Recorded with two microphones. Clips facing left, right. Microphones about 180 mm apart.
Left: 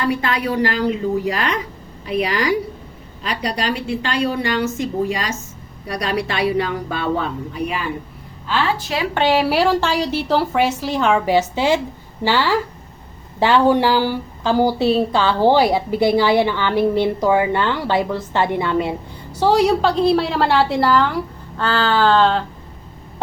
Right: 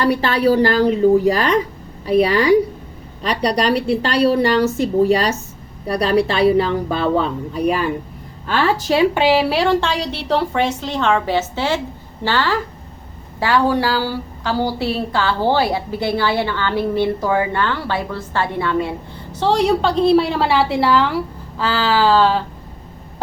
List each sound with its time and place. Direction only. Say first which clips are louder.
0.0 s a woman's voice: right 5 dB; 35° right (ahead or behind)
7.5 s a woman's voice: right 9 dB; 40° right (ahead or behind)
9.1 s a woman's voice: right 1 dB; 5° right (ahead or behind); by 18.9 s 20° left (ahead or behind)
19.4 s a woman's voice: left 1 dB; 5° left (ahead or behind)